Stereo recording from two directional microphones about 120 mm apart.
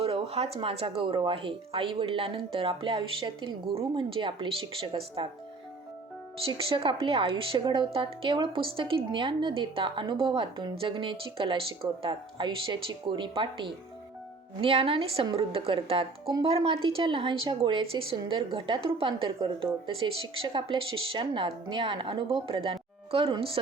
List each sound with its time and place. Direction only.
0.0 s a woman's voice: 55° right (ahead or behind)
6.4 s a woman's voice: 50° right (ahead or behind)